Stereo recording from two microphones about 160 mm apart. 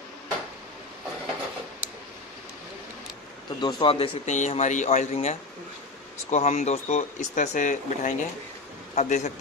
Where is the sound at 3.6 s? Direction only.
30° left (ahead or behind).